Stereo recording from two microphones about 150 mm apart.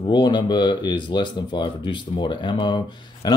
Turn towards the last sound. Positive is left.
turn(degrees=30)  # may be behind; listen again after turning